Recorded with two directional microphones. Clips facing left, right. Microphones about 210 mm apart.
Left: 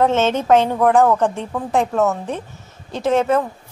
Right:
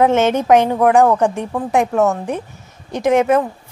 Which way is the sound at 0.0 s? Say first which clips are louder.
Right 3 dB; 15° right (ahead or behind).